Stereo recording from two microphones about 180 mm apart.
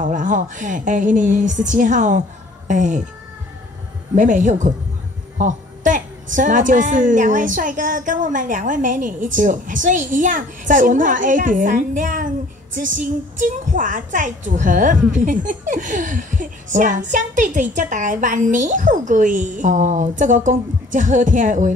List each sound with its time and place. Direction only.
0.0 s a woman's voice: 45° right (ahead or behind)
4.1 s a woman's voice: 45° right (ahead or behind)
5.4 s a sound: 45° right (ahead or behind)
6.3 s a woman's voice: 45° right (ahead or behind)